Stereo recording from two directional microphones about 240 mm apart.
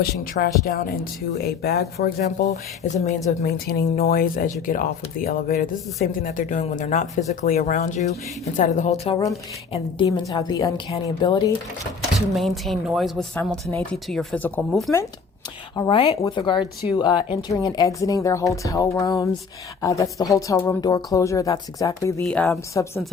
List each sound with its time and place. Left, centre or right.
0.0 s speech: left
1.6 s speech: left
3.4 s speech: left; by 11.5 s centre
12.3 s speech: centre
15.7 s speech: centre